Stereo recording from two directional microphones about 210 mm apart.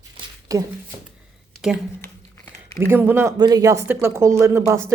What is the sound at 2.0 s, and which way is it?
Crumpling, 10° left (ahead or behind).